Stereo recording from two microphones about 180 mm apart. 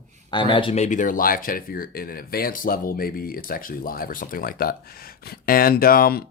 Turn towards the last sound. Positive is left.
turn(degrees=55)  # may be behind; listen again after turning